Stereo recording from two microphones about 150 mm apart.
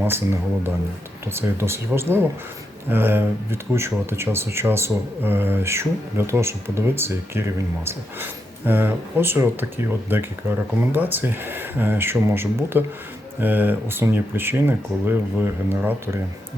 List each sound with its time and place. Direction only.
1.3 s speech: 15° right (ahead or behind)